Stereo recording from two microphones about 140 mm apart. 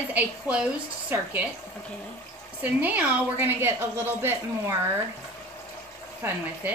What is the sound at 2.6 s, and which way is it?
A woman's voice, 10° right (ahead or behind).